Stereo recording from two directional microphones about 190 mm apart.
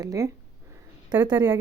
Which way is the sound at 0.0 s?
20° right (ahead or behind).